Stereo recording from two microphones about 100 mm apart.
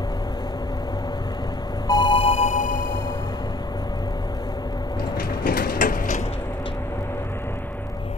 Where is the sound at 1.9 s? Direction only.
50° left (ahead or behind); by 2.5 s 75° left (ahead or behind).